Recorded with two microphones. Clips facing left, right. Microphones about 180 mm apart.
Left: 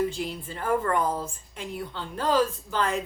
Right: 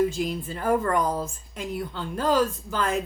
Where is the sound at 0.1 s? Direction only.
40° right (ahead or behind).